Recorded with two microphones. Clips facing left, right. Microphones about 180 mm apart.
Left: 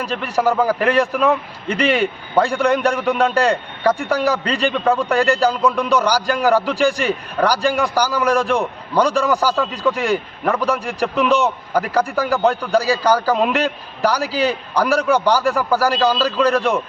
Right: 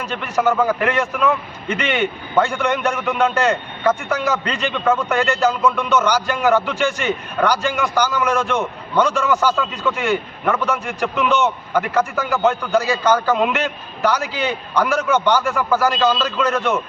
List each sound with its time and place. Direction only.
0.0 s a man's voice: 35° left (ahead or behind)